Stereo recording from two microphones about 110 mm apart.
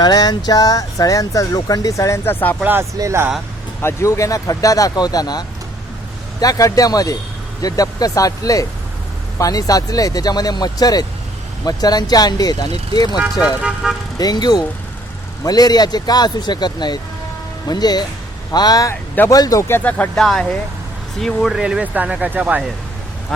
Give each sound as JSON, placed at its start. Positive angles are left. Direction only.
{"t": 0.0, "sound": "speech", "side_deg": 35}
{"t": 3.0, "sound": "speech", "side_deg": -25}
{"t": 3.8, "sound": "speech", "side_deg": 25}
{"t": 13.6, "sound": "speech", "side_deg": -10}
{"t": 14.2, "sound": "speech", "side_deg": 40}
{"t": 20.2, "sound": "speech", "side_deg": 5}